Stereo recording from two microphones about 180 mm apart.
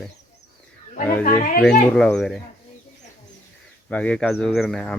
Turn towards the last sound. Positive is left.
turn(degrees=0)  # may be behind; listen again after turning